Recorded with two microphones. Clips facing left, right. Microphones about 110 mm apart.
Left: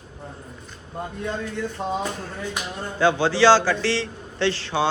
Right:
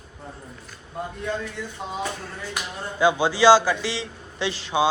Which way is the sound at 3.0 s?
15° right (ahead or behind).